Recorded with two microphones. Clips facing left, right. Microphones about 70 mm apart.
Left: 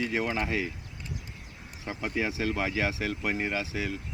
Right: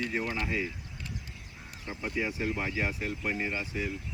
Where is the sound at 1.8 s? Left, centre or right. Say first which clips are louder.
Left 2 dB; left.